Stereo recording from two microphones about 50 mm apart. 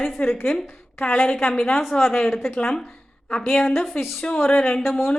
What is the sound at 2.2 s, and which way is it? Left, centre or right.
Speech, centre.